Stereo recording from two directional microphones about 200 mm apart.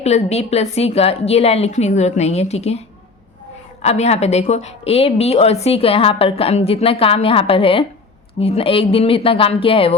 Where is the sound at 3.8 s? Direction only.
30° left (ahead or behind).